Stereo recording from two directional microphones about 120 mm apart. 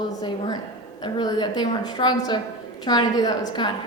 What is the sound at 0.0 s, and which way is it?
A woman's voice, 40° left (ahead or behind).